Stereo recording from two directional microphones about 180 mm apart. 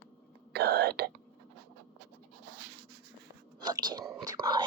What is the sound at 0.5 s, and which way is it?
Throat clearing, 65° right (ahead or behind).